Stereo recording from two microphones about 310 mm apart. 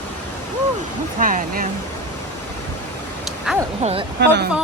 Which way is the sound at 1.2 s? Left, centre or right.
Right.